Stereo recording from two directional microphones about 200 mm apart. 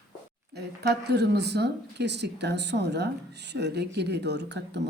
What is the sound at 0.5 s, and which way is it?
Speech, 55° right (ahead or behind).